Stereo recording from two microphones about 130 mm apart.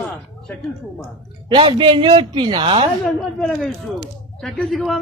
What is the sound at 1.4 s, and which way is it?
A man's voice, 40° right (ahead or behind).